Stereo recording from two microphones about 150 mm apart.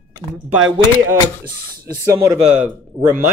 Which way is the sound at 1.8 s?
20° right (ahead or behind).